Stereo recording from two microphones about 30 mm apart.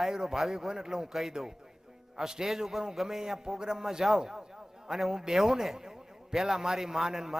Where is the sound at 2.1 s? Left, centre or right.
Centre.